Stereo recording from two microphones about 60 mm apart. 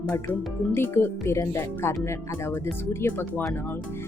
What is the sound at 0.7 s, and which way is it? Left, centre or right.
Speech, left.